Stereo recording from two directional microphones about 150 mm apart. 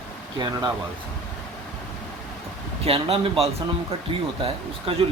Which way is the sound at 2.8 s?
40° right (ahead or behind).